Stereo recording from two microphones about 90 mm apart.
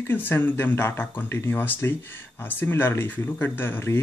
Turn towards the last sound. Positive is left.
turn(degrees=25)  # may be behind; listen again after turning